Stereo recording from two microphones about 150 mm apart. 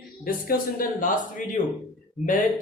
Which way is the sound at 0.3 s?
70° left (ahead or behind).